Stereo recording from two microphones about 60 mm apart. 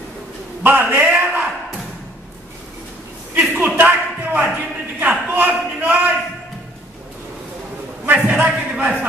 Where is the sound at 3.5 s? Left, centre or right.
Right.